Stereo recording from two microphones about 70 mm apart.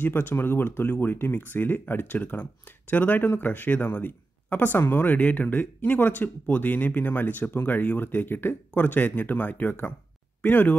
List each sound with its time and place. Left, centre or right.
0.0 s speech: left